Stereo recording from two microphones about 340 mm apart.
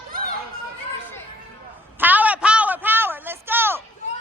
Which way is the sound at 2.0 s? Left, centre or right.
Centre.